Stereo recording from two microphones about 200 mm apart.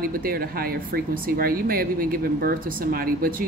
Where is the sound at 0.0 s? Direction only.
50° right (ahead or behind).